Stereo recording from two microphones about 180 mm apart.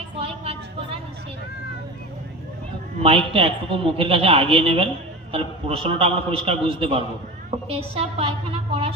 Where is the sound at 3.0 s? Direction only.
30° right (ahead or behind).